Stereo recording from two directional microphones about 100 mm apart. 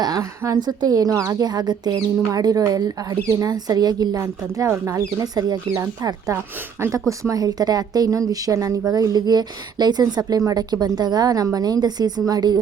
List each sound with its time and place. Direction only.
0.0 s a woman's voice: 35° right (ahead or behind)